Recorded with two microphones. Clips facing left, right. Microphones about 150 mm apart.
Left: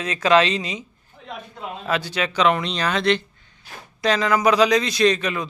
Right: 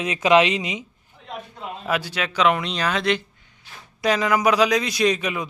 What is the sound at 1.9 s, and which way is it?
Speech, 5° right (ahead or behind).